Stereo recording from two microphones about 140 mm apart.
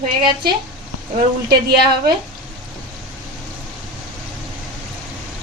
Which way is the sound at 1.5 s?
90° right.